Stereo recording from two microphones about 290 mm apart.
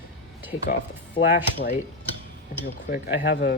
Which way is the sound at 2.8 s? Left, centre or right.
Left.